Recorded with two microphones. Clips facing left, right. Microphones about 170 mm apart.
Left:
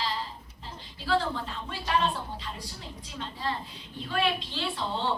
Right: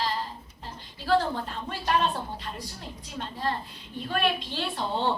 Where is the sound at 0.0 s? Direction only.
50° right (ahead or behind).